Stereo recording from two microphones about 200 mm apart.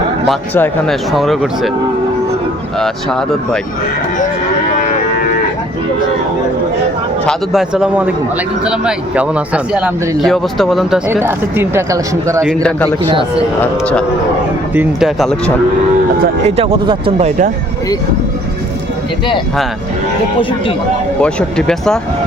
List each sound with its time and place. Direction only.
0.3 s speech: 5° left (ahead or behind)
2.7 s speech: centre (ahead or behind)
7.3 s speech: centre (ahead or behind)
11.1 s speech: 10° right (ahead or behind)
13.1 s a man's voice: 25° right (ahead or behind)
13.6 s speech: 5° left (ahead or behind)
16.4 s speech: 30° right (ahead or behind)
20.4 s speech: 25° left (ahead or behind)
21.2 s speech: 5° left (ahead or behind)